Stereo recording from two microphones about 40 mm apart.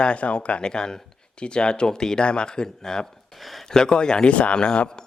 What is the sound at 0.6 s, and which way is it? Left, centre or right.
Speech, centre.